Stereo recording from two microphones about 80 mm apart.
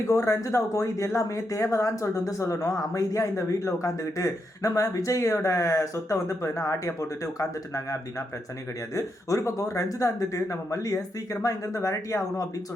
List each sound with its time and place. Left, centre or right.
0.1 s speech: left
9.0 s speech: left